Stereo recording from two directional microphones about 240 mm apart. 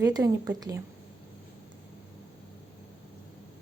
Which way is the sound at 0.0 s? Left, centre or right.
Centre.